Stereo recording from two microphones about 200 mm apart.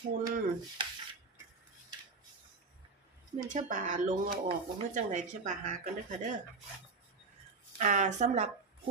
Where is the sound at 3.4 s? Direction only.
40° right (ahead or behind).